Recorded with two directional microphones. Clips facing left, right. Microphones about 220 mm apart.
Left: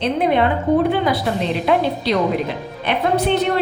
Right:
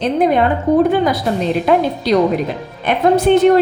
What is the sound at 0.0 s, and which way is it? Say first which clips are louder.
A woman's voice: right 3 dB; 45° right (ahead or behind).